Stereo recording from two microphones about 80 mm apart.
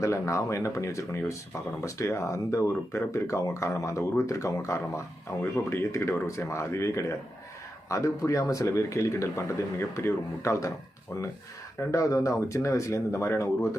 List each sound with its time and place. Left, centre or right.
0.0 s speech: left
5.4 s speech: left
11.8 s speech: left